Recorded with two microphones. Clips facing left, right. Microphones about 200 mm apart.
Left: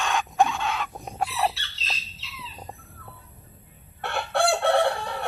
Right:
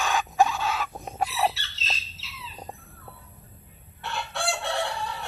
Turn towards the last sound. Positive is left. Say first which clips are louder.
# left 7 dB
turn(degrees=55)  # may be behind; listen again after turning